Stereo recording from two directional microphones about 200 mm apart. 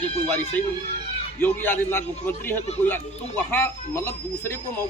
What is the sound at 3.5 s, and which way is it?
Speech, 10° left (ahead or behind).